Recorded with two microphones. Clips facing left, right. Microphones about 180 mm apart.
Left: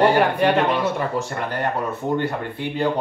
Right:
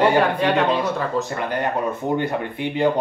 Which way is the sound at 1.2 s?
15° right (ahead or behind).